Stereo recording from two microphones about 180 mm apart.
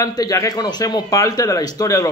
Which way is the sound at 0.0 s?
20° left (ahead or behind).